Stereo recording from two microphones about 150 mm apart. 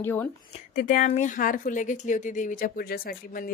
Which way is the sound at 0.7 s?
70° left (ahead or behind).